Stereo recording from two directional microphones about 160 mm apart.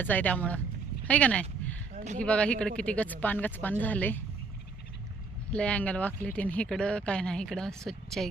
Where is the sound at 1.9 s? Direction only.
50° right (ahead or behind).